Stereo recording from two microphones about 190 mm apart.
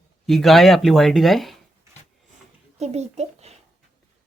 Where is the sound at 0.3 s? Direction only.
Centre (ahead or behind).